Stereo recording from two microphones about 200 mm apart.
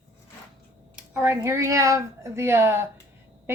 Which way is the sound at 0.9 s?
10° right (ahead or behind).